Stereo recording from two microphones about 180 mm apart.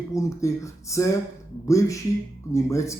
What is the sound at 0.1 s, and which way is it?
Speech, 15° left (ahead or behind).